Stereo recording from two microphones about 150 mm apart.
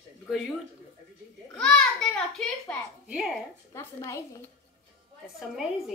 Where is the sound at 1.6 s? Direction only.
5° left (ahead or behind).